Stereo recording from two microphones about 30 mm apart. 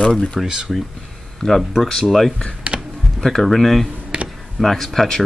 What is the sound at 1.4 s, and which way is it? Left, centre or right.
Speech, left.